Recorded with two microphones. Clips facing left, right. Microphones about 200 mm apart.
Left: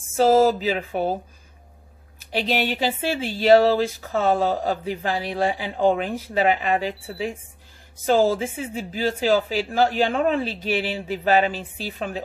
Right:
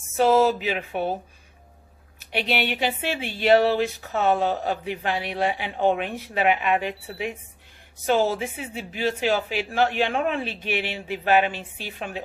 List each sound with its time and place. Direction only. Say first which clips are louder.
0.2 s speech: left 2 dB; 40° left (ahead or behind)
2.3 s speech: left 2 dB; 40° left (ahead or behind)